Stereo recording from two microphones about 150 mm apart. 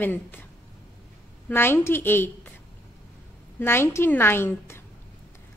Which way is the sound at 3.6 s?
15° left (ahead or behind).